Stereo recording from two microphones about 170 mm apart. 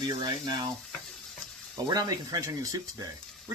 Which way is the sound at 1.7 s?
25° right (ahead or behind).